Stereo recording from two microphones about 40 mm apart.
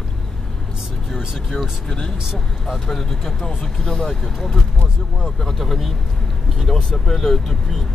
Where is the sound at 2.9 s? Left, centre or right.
Centre.